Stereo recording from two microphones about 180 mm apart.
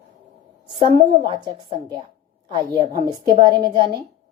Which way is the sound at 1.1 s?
25° right (ahead or behind).